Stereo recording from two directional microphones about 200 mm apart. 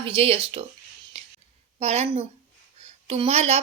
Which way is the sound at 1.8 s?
30° right (ahead or behind).